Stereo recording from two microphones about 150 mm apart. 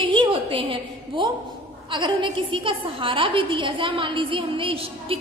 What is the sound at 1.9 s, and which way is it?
A woman's voice, 30° right (ahead or behind).